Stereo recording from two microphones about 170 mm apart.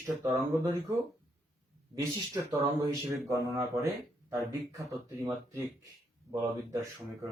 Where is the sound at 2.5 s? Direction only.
25° right (ahead or behind).